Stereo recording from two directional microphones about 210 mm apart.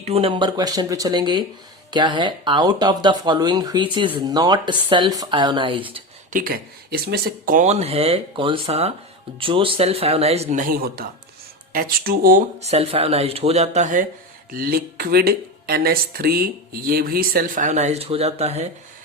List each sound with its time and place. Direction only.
0.0 s speech: 30° right (ahead or behind)
6.3 s speech: 45° right (ahead or behind)
12.5 s speech: 30° right (ahead or behind)